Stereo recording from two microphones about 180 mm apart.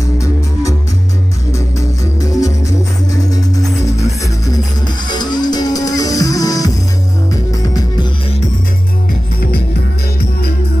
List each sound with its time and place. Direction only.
0.2 s music: 20° left (ahead or behind)
2.1 s music: 20° left (ahead or behind)